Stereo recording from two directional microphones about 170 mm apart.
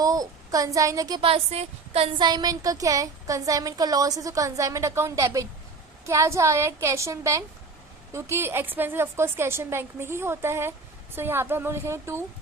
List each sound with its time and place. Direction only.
0.0 s a woman's voice: 20° right (ahead or behind)